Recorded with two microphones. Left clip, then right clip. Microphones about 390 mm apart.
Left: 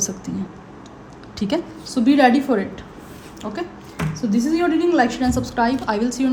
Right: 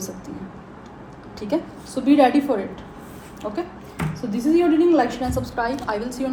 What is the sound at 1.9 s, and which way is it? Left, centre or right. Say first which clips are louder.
Speech: left 1 dB; left.